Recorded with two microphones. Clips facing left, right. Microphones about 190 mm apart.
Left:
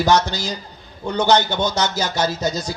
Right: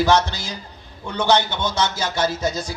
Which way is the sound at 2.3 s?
40° left (ahead or behind).